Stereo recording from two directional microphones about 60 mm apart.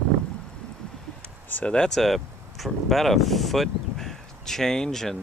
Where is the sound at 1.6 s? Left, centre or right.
Centre.